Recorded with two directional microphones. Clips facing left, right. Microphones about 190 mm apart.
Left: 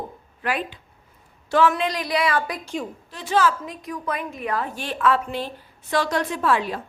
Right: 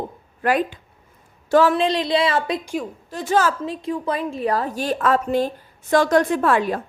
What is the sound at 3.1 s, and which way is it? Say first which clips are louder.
Speech: right 2 dB; 45° right (ahead or behind).